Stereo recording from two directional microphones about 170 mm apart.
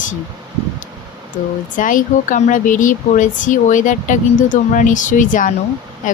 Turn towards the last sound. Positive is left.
turn(degrees=50)  # may be behind; listen again after turning